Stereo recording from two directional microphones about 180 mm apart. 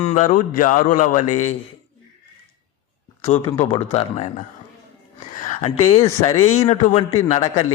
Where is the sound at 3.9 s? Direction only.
30° left (ahead or behind).